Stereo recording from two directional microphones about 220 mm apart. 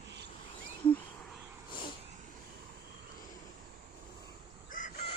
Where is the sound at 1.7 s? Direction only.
20° left (ahead or behind).